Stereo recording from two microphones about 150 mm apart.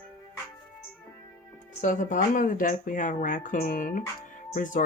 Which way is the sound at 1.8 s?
60° left (ahead or behind).